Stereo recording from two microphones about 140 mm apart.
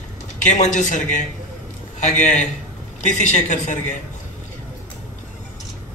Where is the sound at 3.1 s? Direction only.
60° left (ahead or behind).